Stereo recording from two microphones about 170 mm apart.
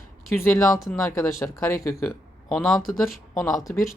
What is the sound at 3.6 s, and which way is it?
Speech, 15° left (ahead or behind).